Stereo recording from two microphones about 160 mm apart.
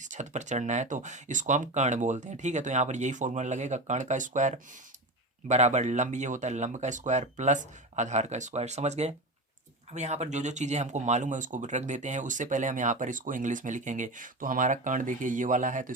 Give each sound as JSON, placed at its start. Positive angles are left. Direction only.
{"t": 0.0, "sound": "speech", "side_deg": -50}